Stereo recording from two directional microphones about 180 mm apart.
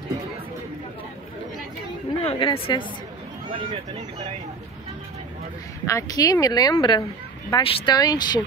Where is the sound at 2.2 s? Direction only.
30° left (ahead or behind).